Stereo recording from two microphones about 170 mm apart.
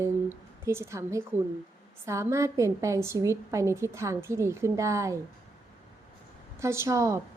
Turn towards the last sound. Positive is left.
turn(degrees=-15)  # may be behind; listen again after turning